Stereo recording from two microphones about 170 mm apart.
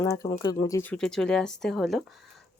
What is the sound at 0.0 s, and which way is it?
Speech, 20° left (ahead or behind).